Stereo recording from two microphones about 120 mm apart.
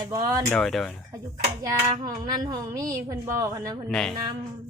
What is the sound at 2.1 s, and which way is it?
A woman's voice, 35° right (ahead or behind).